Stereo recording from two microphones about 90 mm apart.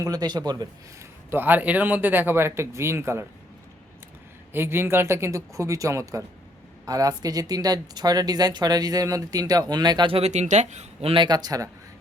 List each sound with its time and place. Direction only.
0.0 s speech: 45° right (ahead or behind)
1.3 s speech: 20° right (ahead or behind)
4.5 s speech: 25° right (ahead or behind); by 10.1 s 50° right (ahead or behind)
11.0 s speech: 80° right
11.3 s speech: 50° right (ahead or behind)